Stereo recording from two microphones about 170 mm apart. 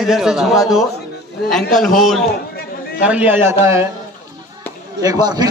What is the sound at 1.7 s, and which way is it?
A man's voice, centre (ahead or behind).